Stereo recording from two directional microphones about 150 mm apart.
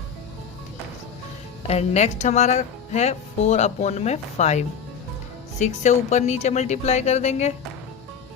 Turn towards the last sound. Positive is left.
turn(degrees=50)  # may be behind; listen again after turning